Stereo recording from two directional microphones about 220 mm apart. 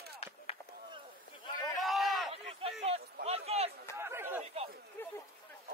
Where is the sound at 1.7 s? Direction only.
Centre (ahead or behind).